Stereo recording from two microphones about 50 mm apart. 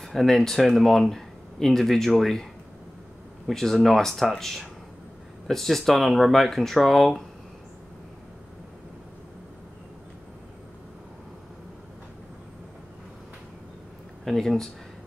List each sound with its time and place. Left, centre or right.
0.0 s speech: centre
3.4 s speech: centre
14.2 s speech: centre